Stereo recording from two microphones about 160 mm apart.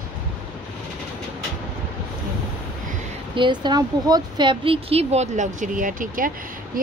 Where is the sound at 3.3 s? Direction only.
30° right (ahead or behind); by 6.3 s 60° right (ahead or behind).